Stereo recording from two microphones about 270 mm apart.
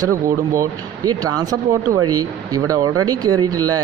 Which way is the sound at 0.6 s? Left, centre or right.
Centre.